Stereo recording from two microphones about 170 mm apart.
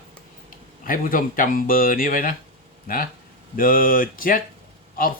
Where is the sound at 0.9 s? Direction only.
55° left (ahead or behind).